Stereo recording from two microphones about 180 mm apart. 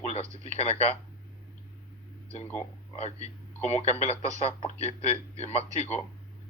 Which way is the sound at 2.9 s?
35° left (ahead or behind).